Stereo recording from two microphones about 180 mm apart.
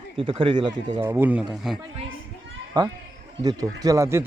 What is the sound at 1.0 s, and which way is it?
Speech, 10° right (ahead or behind).